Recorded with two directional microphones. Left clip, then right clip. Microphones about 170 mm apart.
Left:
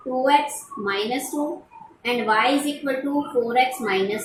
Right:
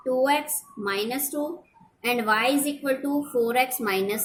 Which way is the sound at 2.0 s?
30° right (ahead or behind).